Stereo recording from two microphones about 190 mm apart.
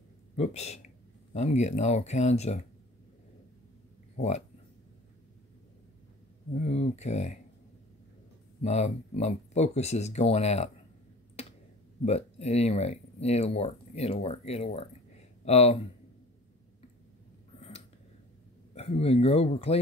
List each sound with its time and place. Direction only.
0.4 s speech: 35° left (ahead or behind)
6.5 s speech: 35° left (ahead or behind)
8.6 s speech: 35° left (ahead or behind)
12.0 s speech: 35° left (ahead or behind)
17.6 s a sound: 35° left (ahead or behind)
18.8 s speech: 35° left (ahead or behind)